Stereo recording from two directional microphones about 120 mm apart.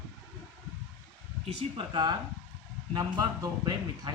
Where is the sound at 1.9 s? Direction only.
35° right (ahead or behind).